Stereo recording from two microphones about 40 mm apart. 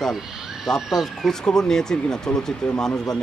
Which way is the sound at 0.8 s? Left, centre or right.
Centre.